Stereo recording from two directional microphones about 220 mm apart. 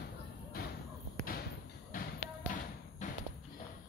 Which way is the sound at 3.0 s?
35° left (ahead or behind).